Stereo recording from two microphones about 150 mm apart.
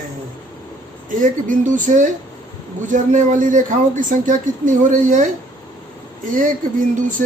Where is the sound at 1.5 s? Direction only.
55° right (ahead or behind).